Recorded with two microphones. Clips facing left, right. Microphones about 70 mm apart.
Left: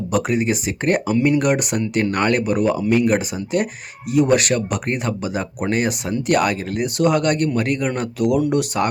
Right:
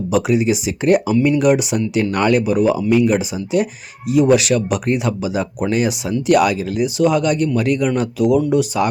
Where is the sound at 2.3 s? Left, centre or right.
Left.